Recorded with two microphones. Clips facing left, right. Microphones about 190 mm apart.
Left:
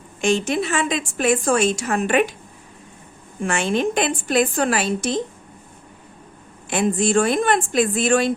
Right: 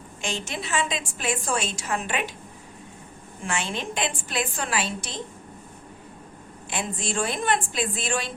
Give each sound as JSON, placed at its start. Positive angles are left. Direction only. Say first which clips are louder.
{"t": 0.2, "sound": "a woman's voice", "louder": "left 12 dB", "side_deg": 50}
{"t": 3.4, "sound": "a woman's voice", "louder": "left 9 dB", "side_deg": 50}
{"t": 6.7, "sound": "a woman's voice", "louder": "left 11 dB", "side_deg": 50}